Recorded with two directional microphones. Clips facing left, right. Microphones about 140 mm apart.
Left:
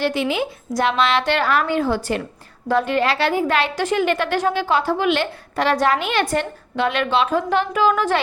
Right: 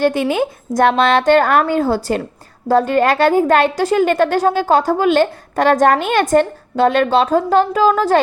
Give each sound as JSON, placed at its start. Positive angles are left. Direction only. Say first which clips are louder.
{"t": 0.0, "sound": "a woman's voice", "louder": "right 5 dB", "side_deg": -50}